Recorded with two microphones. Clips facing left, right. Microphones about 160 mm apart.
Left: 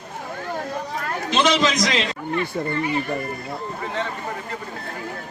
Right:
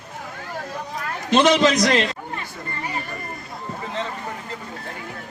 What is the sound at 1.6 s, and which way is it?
Speech, 65° right (ahead or behind).